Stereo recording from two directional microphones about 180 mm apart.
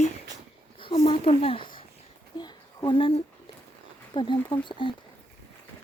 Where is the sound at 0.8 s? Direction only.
30° left (ahead or behind).